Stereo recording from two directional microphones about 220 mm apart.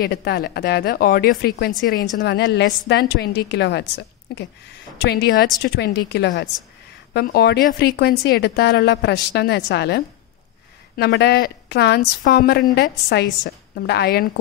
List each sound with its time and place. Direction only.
0.0 s a woman's voice: 45° left (ahead or behind)